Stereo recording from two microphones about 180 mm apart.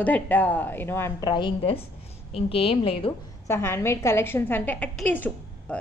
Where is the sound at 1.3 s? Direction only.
25° left (ahead or behind).